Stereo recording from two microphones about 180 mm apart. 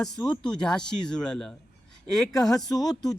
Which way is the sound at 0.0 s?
5° left (ahead or behind).